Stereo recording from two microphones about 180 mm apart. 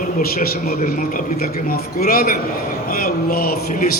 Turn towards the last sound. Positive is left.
turn(degrees=55)  # may be behind; listen again after turning